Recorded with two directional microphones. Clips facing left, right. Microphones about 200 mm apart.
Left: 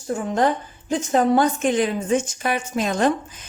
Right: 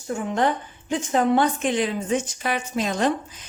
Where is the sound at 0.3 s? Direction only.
40° left (ahead or behind).